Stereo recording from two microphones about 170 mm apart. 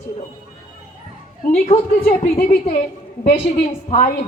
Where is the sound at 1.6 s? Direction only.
35° left (ahead or behind).